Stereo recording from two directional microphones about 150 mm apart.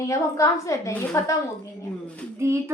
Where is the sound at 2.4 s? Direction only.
20° right (ahead or behind).